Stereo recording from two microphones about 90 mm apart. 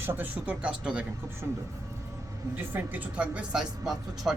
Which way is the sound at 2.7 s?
20° right (ahead or behind).